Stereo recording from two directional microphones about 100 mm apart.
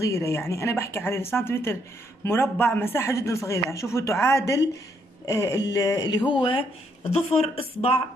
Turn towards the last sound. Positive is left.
turn(degrees=90)